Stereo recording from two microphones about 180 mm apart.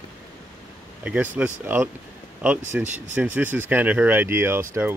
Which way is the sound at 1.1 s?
5° right (ahead or behind).